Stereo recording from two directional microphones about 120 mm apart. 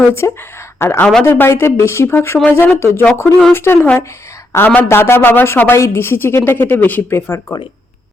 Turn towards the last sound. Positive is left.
turn(degrees=20)  # may be behind; listen again after turning